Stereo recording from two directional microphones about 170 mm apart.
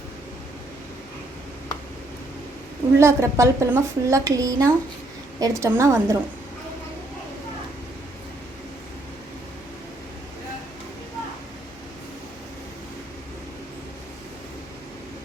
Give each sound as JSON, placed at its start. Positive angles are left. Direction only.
{"t": 3.0, "sound": "speech", "side_deg": -15}